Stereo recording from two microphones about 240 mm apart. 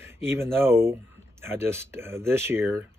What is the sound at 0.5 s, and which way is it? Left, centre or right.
Speech, centre.